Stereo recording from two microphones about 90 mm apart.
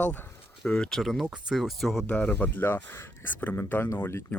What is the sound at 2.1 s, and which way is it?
Speech, 20° left (ahead or behind).